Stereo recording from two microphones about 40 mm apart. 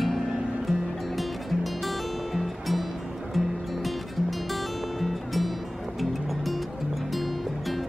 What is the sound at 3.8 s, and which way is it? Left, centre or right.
Music, centre.